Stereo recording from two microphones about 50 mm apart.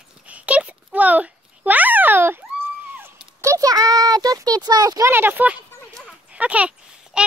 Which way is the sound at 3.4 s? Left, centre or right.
Right.